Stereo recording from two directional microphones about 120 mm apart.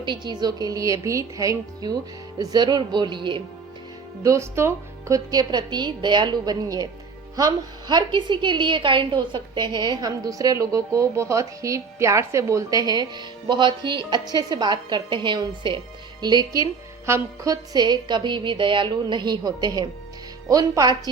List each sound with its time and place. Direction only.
0.0 s a woman's voice: 40° right (ahead or behind)
4.2 s a woman's voice: 25° right (ahead or behind)